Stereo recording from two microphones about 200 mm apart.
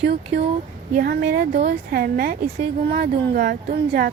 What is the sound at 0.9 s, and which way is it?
A woman's voice, 50° right (ahead or behind).